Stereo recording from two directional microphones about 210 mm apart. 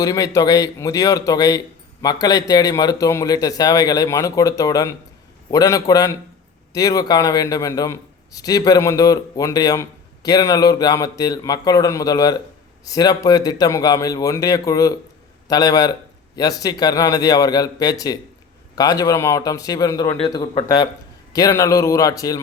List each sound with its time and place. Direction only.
0.0 s a man's voice: 15° left (ahead or behind)